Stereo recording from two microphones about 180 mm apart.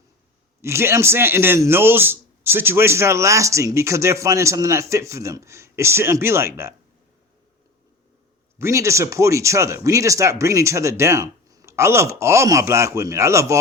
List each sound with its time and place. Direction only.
0.6 s a man's voice: 15° right (ahead or behind)
8.5 s a man's voice: 15° right (ahead or behind)